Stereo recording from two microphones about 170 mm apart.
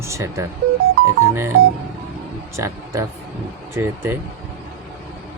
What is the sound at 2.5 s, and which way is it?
Speech, 15° right (ahead or behind).